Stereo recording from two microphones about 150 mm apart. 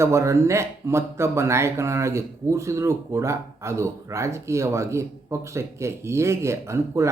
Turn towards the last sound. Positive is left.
turn(degrees=-20)  # may be behind; listen again after turning